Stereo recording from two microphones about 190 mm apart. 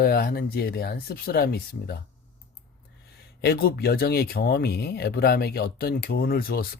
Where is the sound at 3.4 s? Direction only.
55° left (ahead or behind).